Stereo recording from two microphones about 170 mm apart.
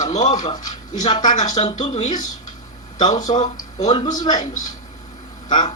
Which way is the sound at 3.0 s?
20° left (ahead or behind).